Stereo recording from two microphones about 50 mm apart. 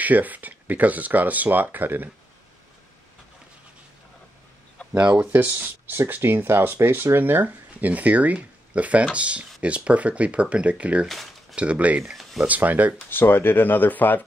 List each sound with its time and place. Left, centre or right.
0.0 s speech: right
5.3 s speech: right
12.1 s speech: centre
12.4 s speech: right
13.1 s speech: left